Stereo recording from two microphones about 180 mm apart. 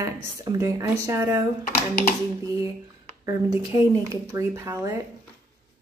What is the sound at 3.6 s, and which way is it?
A woman's voice, 20° right (ahead or behind).